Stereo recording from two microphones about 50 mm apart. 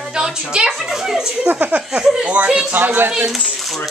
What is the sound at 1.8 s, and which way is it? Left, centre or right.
Speech, centre.